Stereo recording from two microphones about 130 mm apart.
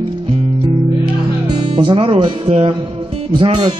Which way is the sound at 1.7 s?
40° right (ahead or behind).